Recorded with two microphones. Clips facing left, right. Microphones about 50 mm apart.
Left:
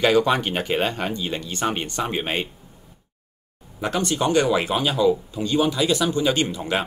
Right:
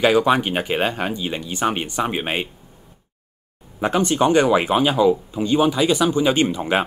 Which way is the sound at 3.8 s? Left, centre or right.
Right.